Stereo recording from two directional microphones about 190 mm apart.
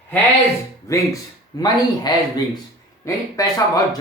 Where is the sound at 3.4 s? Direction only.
20° left (ahead or behind).